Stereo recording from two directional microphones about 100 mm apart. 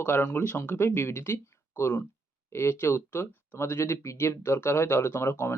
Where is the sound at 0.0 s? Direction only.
25° left (ahead or behind).